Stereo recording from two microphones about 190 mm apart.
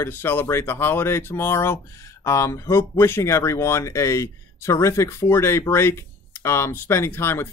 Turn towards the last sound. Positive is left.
turn(degrees=10)  # may be behind; listen again after turning